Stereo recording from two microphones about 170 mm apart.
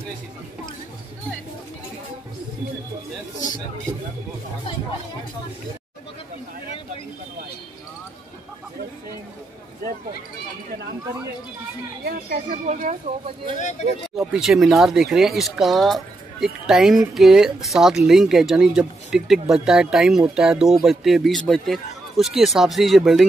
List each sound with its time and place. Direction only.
12.0 s speech: 55° right (ahead or behind)
14.1 s speech: centre (ahead or behind)